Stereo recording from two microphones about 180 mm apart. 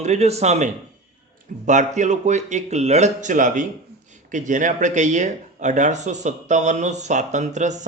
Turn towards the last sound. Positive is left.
turn(degrees=-40)  # may be behind; listen again after turning